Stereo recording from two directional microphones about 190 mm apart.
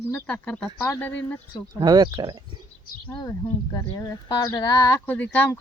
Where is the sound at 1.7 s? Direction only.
20° right (ahead or behind).